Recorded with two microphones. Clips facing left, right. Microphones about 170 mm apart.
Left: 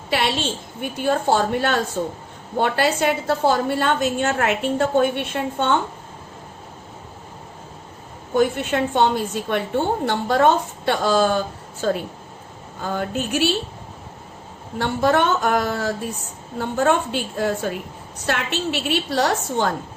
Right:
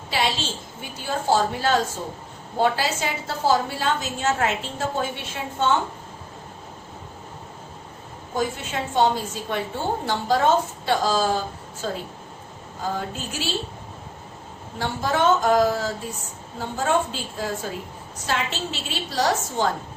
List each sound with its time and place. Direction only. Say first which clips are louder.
0.1 s a woman's voice: left 3 dB; 60° left (ahead or behind)
8.4 s a woman's voice: left 7 dB; 65° left (ahead or behind)
14.8 s a woman's voice: left 5 dB; 60° left (ahead or behind)